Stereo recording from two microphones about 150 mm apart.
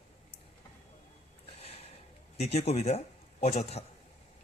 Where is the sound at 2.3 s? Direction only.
45° left (ahead or behind).